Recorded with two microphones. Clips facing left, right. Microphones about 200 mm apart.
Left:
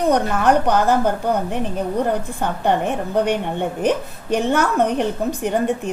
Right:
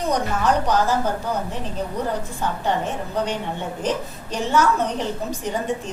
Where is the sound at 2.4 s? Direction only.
60° left (ahead or behind).